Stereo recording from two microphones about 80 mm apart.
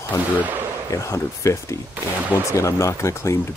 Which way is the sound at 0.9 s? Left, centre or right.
Left.